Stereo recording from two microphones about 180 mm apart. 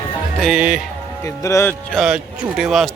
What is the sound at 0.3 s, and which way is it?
Speech, centre (ahead or behind).